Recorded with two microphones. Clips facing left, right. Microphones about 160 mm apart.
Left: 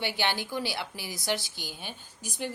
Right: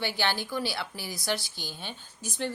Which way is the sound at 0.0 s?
15° left (ahead or behind).